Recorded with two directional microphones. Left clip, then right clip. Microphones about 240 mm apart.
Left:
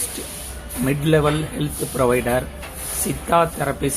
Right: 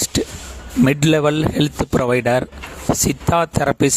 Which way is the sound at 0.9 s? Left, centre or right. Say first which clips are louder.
Right 2 dB; right.